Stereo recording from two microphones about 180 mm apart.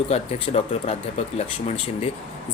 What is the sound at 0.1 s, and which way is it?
Speech, 35° left (ahead or behind).